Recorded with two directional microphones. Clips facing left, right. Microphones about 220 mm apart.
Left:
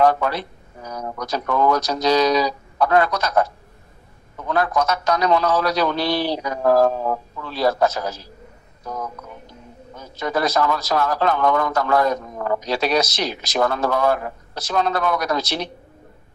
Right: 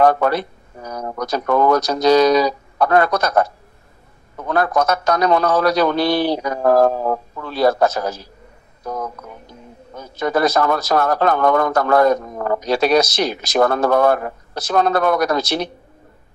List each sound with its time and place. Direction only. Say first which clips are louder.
0.0 s speech: right 3 dB; 50° right (ahead or behind)
9.9 s speech: right 4 dB; 50° right (ahead or behind)